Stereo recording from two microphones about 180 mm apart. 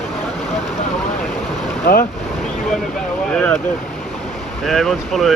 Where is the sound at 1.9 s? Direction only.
55° left (ahead or behind).